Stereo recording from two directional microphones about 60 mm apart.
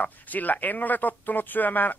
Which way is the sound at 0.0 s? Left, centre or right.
Left.